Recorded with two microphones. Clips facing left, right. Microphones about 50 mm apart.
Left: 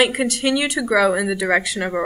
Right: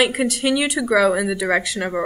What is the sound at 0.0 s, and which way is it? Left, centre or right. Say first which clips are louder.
Speech: left 1 dB; centre.